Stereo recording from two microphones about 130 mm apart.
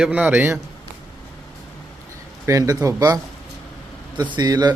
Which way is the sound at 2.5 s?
25° right (ahead or behind).